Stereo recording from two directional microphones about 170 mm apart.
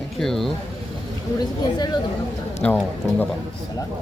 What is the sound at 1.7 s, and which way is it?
Speech, 25° left (ahead or behind).